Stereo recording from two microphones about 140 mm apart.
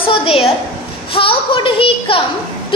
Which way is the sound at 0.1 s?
40° left (ahead or behind).